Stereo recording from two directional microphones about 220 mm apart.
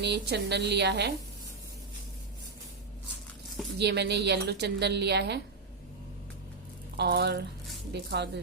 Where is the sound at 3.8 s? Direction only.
50° right (ahead or behind).